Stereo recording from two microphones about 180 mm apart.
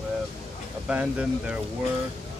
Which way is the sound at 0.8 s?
5° right (ahead or behind).